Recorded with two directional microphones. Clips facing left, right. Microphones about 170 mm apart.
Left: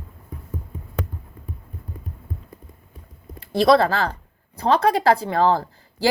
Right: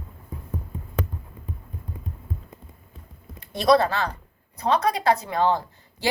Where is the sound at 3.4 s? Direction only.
30° left (ahead or behind).